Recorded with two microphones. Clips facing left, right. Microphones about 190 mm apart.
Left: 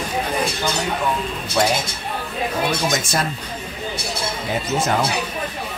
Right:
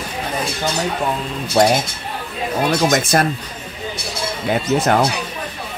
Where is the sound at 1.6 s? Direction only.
40° right (ahead or behind).